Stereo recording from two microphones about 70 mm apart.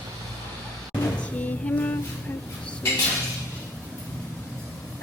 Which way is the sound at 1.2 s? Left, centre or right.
Centre.